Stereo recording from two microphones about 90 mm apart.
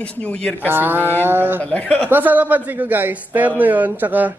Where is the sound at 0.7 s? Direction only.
20° right (ahead or behind).